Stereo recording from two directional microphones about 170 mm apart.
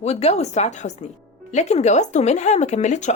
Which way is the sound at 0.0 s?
40° left (ahead or behind).